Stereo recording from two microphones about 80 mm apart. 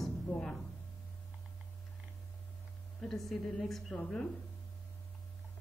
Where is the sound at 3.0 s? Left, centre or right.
Centre.